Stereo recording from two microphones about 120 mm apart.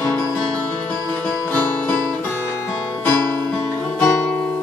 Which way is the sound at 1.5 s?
10° left (ahead or behind).